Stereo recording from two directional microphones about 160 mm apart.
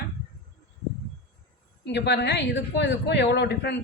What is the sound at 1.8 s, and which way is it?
Speech, 90° left.